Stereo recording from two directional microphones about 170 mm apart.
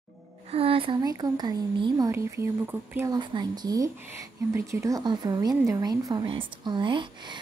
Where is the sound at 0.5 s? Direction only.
35° right (ahead or behind); by 3.1 s 10° right (ahead or behind).